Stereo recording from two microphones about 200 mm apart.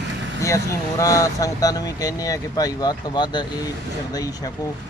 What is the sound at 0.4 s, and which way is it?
Speech, 15° left (ahead or behind).